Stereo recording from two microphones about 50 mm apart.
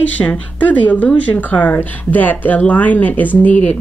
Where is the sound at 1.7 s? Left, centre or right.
Left.